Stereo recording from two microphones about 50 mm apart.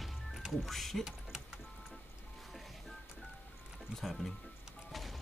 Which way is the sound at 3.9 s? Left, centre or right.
Centre.